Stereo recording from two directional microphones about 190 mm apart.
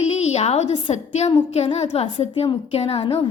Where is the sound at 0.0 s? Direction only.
35° left (ahead or behind).